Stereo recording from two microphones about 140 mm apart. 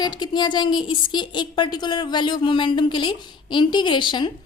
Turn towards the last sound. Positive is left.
turn(degrees=35)  # may be behind; listen again after turning